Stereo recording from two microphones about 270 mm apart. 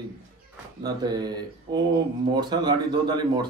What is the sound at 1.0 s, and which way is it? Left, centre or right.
A man's voice, centre.